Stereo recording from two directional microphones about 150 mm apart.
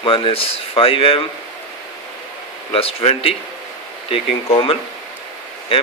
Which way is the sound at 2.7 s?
40° left (ahead or behind).